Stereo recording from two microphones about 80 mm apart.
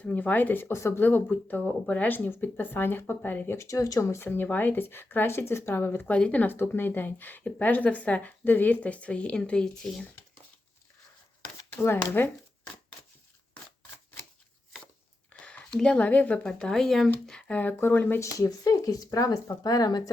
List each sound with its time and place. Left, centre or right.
0.0 s speech: left
3.7 s speech: left
6.1 s speech: centre
11.8 s speech: left
15.3 s a sound: centre
16.4 s speech: centre
17.5 s speech: left
18.3 s speech: left